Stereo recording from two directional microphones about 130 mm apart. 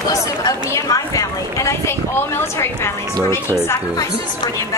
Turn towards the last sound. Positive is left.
turn(degrees=20)  # may be behind; listen again after turning